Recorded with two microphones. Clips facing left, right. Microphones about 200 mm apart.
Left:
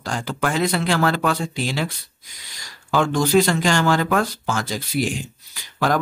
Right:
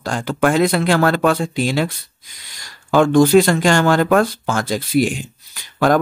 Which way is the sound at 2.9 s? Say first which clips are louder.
Right 7 dB; 55° right (ahead or behind).